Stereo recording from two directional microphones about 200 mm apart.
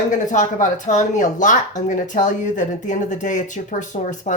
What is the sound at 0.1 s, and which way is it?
Speech, 40° left (ahead or behind).